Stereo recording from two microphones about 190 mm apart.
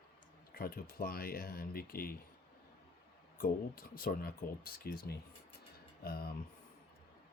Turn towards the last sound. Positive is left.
turn(degrees=55)  # may be behind; listen again after turning